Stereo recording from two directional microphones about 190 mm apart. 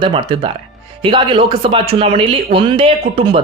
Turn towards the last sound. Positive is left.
turn(degrees=-30)  # may be behind; listen again after turning